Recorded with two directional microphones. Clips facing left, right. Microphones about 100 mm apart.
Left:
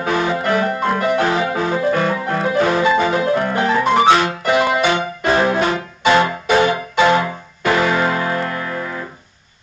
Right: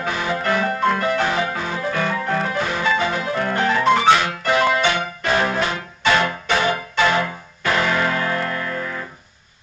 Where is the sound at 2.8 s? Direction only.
15° left (ahead or behind).